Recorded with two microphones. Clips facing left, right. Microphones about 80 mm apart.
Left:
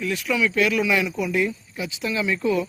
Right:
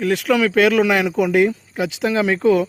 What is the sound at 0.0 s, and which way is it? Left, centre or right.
A man's voice, right.